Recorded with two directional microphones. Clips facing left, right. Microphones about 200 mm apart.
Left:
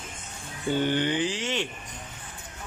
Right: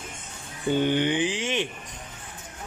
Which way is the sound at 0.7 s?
15° right (ahead or behind).